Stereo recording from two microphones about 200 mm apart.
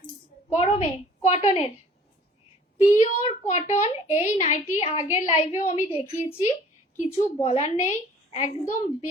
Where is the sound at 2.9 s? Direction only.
35° left (ahead or behind).